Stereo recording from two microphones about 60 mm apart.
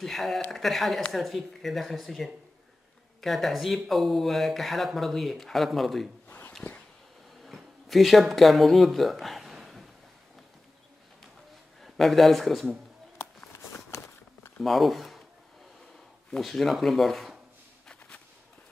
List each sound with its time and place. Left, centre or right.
0.0 s speech: centre
6.2 s a sound: left
7.4 s speech: centre
11.8 s speech: centre
13.2 s a sound: left
14.6 s speech: centre
16.3 s speech: centre